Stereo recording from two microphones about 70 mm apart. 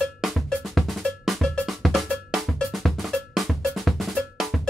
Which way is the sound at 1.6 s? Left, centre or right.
Centre.